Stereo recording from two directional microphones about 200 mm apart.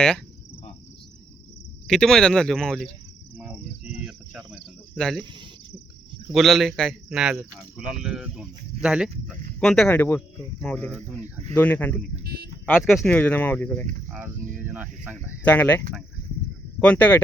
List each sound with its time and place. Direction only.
1.9 s speech: 5° left (ahead or behind)
4.0 s speech: centre (ahead or behind)
6.3 s speech: centre (ahead or behind)
11.1 s speech: 35° right (ahead or behind)
11.5 s speech: 10° left (ahead or behind)
12.2 s speech: 50° right (ahead or behind)
12.8 s speech: 5° left (ahead or behind)
14.1 s speech: 10° right (ahead or behind)
15.4 s speech: 10° left (ahead or behind)
16.8 s speech: 5° left (ahead or behind)